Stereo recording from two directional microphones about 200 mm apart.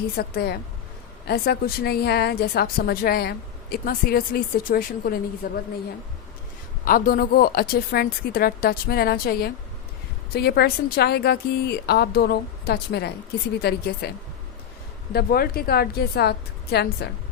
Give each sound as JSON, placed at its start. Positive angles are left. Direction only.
{"t": 0.2, "sound": "a woman's voice", "side_deg": 50}
{"t": 6.8, "sound": "a woman's voice", "side_deg": 45}
{"t": 15.1, "sound": "a woman's voice", "side_deg": 50}